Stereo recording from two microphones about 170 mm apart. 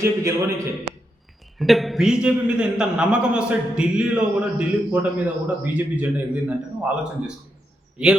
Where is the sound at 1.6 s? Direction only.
Centre (ahead or behind).